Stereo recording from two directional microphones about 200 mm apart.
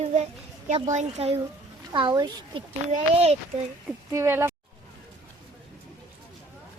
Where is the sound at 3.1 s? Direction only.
30° right (ahead or behind).